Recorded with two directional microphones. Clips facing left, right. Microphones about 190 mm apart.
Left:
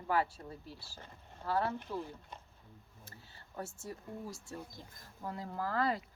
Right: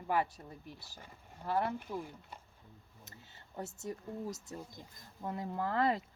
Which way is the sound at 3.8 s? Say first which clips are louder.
Right 4 dB; 20° right (ahead or behind).